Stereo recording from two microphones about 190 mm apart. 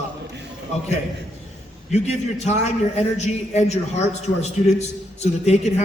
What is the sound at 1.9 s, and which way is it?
A man's voice, 35° left (ahead or behind).